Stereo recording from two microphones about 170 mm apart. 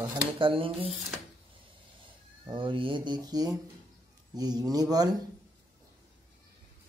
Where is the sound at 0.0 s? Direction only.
30° right (ahead or behind).